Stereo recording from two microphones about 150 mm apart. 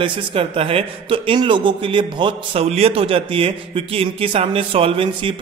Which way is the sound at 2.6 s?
40° right (ahead or behind).